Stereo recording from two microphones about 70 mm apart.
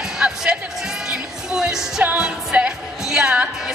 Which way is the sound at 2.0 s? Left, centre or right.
Right.